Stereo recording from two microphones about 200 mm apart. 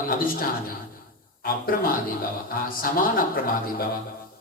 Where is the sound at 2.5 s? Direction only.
45° left (ahead or behind).